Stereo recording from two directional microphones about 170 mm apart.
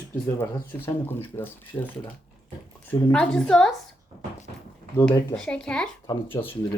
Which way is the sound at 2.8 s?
5° left (ahead or behind).